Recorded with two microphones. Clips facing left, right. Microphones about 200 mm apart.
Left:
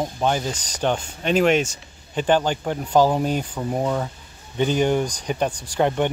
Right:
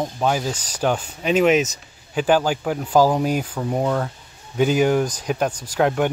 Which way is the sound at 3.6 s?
Centre (ahead or behind).